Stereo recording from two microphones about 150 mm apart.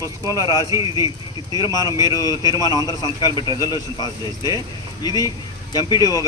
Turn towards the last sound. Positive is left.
turn(degrees=25)  # may be behind; listen again after turning